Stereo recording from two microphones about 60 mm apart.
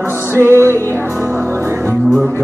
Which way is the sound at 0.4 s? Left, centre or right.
Right.